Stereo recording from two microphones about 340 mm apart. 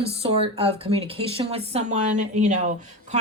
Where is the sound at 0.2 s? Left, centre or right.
Centre.